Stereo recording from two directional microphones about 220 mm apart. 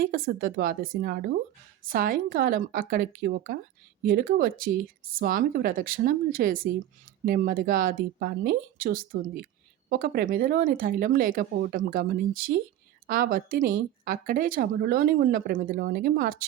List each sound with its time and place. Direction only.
0.0 s speech: 40° right (ahead or behind)